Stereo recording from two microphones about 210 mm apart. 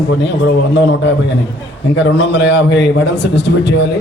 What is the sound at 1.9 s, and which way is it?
A man's voice, 55° left (ahead or behind).